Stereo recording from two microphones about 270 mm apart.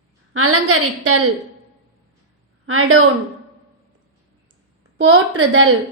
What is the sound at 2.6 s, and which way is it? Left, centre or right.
Speech, right.